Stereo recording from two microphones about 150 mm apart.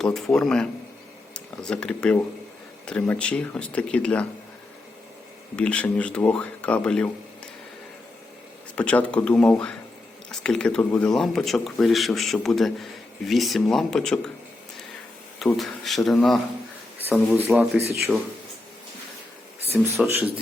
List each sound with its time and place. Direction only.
0.0 s speech: 5° left (ahead or behind)
5.5 s speech: 10° left (ahead or behind)
8.7 s speech: 10° left (ahead or behind)
15.4 s speech: centre (ahead or behind)
17.5 s speech: 15° right (ahead or behind)
19.7 s speech: 15° right (ahead or behind)